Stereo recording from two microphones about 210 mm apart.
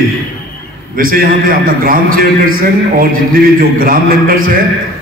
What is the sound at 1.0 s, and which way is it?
A man's voice, 45° right (ahead or behind).